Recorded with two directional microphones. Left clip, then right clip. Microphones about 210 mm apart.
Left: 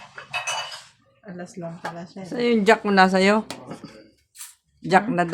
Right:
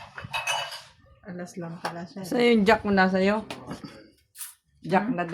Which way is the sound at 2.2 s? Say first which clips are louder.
Right 1 dB; 25° right (ahead or behind).